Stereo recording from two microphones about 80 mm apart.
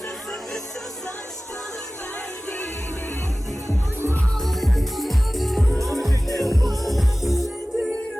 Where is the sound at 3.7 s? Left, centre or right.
Right.